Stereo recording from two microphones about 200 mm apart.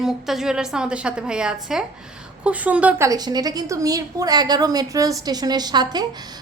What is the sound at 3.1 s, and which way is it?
A woman's voice, 20° right (ahead or behind).